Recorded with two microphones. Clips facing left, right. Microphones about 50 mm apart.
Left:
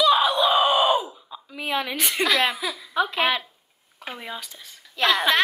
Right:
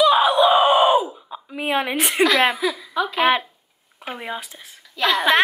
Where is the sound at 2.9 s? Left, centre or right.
Left.